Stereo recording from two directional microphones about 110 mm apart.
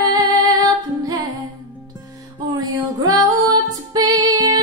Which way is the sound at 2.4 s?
35° right (ahead or behind).